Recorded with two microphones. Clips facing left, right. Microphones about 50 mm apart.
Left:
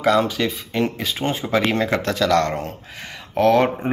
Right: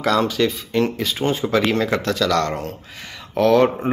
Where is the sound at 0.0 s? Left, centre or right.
Centre.